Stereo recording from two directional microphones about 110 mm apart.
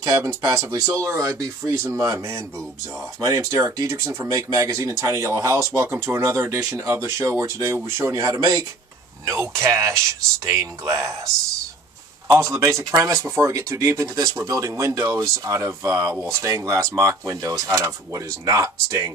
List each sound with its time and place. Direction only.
0.0 s speech: 30° right (ahead or behind)